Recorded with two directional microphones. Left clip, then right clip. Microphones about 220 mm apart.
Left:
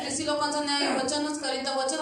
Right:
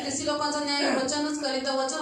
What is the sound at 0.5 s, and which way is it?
A woman's voice, 40° left (ahead or behind).